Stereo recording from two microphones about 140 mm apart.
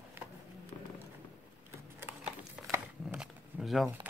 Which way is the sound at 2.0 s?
15° right (ahead or behind).